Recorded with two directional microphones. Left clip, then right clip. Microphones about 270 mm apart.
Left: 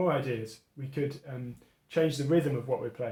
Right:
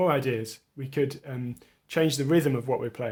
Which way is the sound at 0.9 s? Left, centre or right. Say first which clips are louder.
Right 6 dB; right.